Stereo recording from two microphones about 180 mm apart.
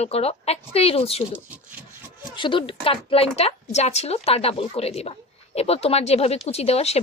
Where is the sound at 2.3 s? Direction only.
25° left (ahead or behind).